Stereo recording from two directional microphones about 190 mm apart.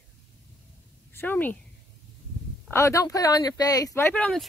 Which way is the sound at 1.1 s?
10° left (ahead or behind).